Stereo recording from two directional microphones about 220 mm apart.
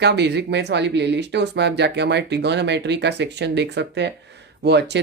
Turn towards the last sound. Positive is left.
turn(degrees=-50)  # may be behind; listen again after turning